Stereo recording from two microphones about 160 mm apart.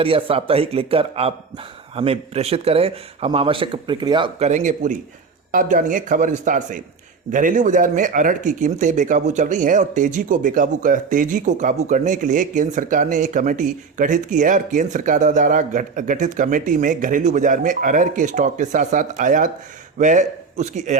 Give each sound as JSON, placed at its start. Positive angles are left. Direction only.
{"t": 0.0, "sound": "speech", "side_deg": -35}
{"t": 4.4, "sound": "a man's voice", "side_deg": -45}